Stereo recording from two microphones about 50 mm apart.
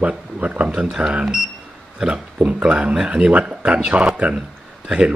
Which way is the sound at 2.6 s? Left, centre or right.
Right.